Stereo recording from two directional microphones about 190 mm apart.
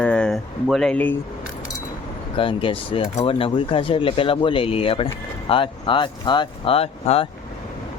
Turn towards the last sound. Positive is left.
turn(degrees=30)  # may be behind; listen again after turning